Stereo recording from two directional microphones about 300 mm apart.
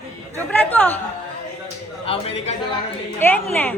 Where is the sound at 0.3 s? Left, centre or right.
Centre.